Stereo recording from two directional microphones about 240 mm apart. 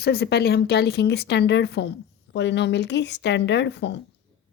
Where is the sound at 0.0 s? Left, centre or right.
Left.